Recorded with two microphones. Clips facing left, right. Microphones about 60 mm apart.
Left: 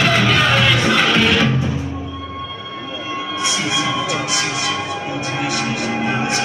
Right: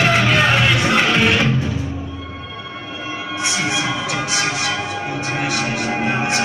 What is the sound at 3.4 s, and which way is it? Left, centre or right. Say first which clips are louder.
Train: even; right.